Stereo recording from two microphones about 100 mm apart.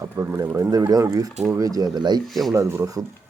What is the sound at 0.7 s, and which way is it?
Speech, 40° right (ahead or behind).